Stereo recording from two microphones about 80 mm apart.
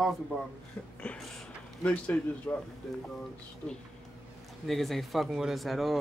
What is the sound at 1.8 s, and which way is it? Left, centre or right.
Speech, centre.